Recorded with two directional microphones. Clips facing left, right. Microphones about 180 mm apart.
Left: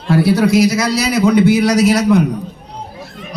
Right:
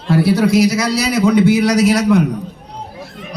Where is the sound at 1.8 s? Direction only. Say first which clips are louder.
Left 1 dB; 25° left (ahead or behind).